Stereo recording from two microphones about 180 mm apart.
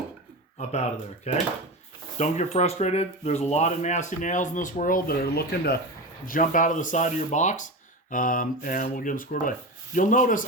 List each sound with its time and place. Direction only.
0.6 s speech: 40° left (ahead or behind); by 5.8 s 60° left (ahead or behind)
6.2 s speech: 50° left (ahead or behind)